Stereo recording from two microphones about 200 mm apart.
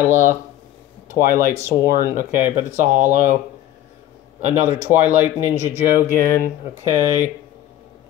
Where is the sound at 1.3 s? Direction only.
45° right (ahead or behind).